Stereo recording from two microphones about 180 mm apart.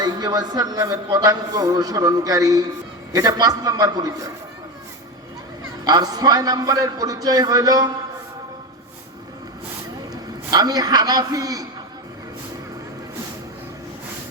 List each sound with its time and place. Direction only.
0.0 s a man's voice: 20° right (ahead or behind)
5.8 s a man's voice: 20° right (ahead or behind)
10.5 s a man's voice: 20° right (ahead or behind)